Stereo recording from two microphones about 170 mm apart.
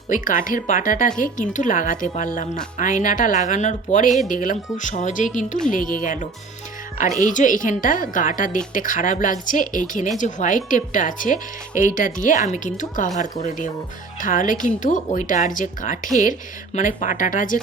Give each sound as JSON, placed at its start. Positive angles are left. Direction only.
{"t": 0.1, "sound": "speech", "side_deg": 50}
{"t": 14.2, "sound": "speech", "side_deg": 50}